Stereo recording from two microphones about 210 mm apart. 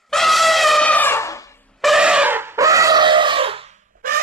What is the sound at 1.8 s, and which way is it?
Chicken, centre (ahead or behind).